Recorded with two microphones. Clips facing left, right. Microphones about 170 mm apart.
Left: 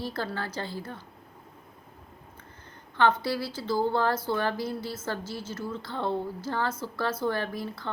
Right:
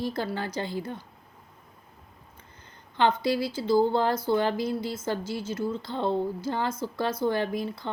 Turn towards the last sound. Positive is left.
turn(degrees=-15)  # may be behind; listen again after turning